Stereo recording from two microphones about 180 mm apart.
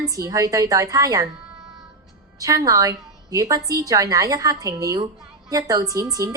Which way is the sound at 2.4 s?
20° right (ahead or behind).